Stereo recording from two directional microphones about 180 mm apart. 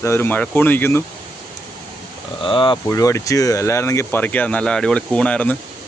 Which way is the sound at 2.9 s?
15° left (ahead or behind).